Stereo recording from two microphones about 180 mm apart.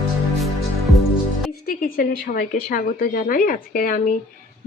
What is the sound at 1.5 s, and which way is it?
Speech, 50° left (ahead or behind).